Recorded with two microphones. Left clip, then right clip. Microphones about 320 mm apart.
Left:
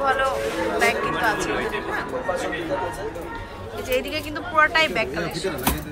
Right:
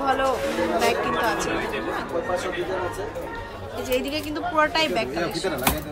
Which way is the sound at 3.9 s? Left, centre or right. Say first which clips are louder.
Left 1 dB; centre.